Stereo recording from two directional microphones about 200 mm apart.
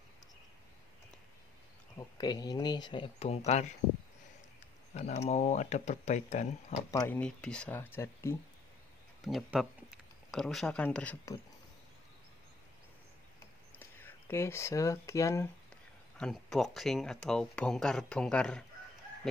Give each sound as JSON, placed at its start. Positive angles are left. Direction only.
{"t": 2.0, "sound": "speech", "side_deg": 20}
{"t": 4.9, "sound": "speech", "side_deg": 35}
{"t": 6.9, "sound": "speech", "side_deg": 10}
{"t": 9.2, "sound": "speech", "side_deg": 0}
{"t": 13.7, "sound": "speech", "side_deg": 10}
{"t": 16.2, "sound": "speech", "side_deg": 0}